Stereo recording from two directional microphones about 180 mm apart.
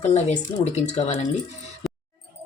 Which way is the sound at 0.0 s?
40° left (ahead or behind).